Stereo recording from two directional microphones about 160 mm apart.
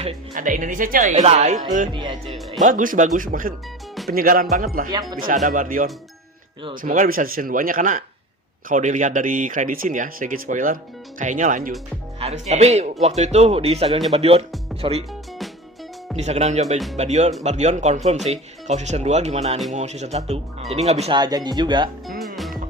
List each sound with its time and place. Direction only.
0.3 s speech: 55° right (ahead or behind)
1.9 s speech: 30° right (ahead or behind)
2.6 s speech: 55° right (ahead or behind)
12.2 s speech: 40° right (ahead or behind)
16.1 s speech: 40° right (ahead or behind)
21.1 s speech: 25° right (ahead or behind)
22.4 s music: centre (ahead or behind)